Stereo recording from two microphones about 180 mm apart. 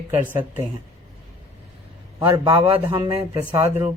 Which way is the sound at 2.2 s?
25° right (ahead or behind).